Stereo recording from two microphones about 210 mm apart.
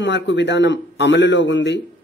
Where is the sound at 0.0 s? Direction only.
60° left (ahead or behind).